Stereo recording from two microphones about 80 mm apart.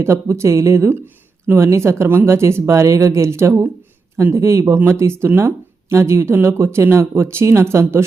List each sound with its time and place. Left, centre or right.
0.0 s speech: right